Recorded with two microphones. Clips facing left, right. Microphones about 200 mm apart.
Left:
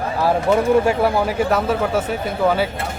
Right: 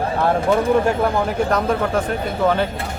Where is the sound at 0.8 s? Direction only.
5° left (ahead or behind).